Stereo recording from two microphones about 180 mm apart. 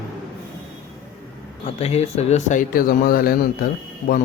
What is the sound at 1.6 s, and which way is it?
Speech, 35° left (ahead or behind).